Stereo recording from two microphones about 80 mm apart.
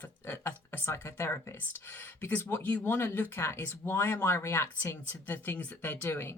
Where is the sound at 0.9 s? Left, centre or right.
Left.